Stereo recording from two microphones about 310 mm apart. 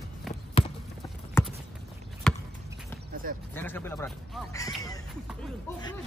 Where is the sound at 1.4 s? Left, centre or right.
Centre.